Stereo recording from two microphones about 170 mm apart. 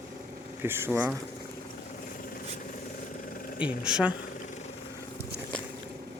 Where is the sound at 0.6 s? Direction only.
15° right (ahead or behind).